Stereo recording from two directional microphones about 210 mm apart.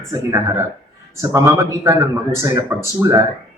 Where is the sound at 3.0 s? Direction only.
15° right (ahead or behind).